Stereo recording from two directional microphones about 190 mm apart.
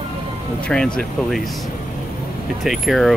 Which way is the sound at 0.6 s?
5° left (ahead or behind).